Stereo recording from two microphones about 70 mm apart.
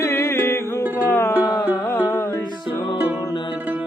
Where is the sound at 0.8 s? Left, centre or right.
Right.